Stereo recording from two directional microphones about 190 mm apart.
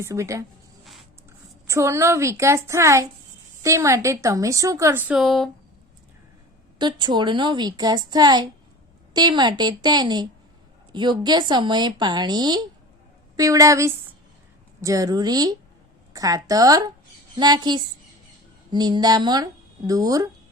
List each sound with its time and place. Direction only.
0.0 s a woman's voice: 15° right (ahead or behind)
1.6 s a woman's voice: 15° right (ahead or behind)
6.7 s a woman's voice: 25° right (ahead or behind)